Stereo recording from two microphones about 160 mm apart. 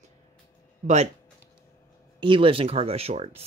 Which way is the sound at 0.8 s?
45° right (ahead or behind).